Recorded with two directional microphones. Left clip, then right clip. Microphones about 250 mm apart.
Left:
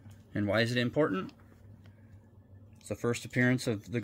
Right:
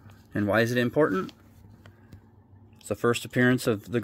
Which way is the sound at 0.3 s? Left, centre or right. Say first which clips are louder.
Right 5 dB; right.